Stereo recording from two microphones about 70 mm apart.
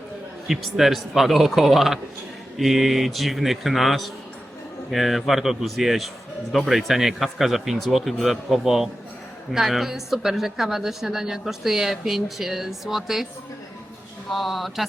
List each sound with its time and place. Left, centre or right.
0.4 s a woman's voice: centre
14.3 s a woman's voice: centre